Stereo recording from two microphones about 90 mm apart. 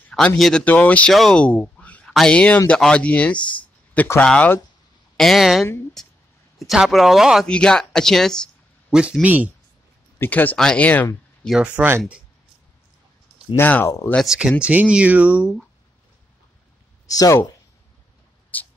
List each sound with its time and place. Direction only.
0.4 s speech: 5° left (ahead or behind)
0.7 s speech: 15° left (ahead or behind)
1.3 s a sound: 15° left (ahead or behind)
2.1 s speech: 10° left (ahead or behind)
5.1 s speech: 5° left (ahead or behind)
6.7 s speech: centre (ahead or behind)
7.4 s speech: 10° left (ahead or behind)
9.2 s speech: 15° right (ahead or behind)
10.1 s speech: 20° left (ahead or behind)
11.6 s speech: 15° right (ahead or behind)
13.6 s speech: 20° left (ahead or behind)
14.2 s speech: 5° right (ahead or behind)
17.1 s speech: 40° left (ahead or behind)
18.5 s mouse: 20° left (ahead or behind)